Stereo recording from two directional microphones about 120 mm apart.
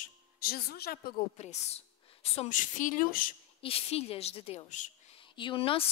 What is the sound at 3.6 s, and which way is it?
A woman's voice, 55° left (ahead or behind).